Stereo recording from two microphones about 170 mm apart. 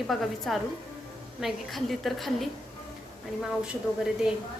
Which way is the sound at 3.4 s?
5° right (ahead or behind).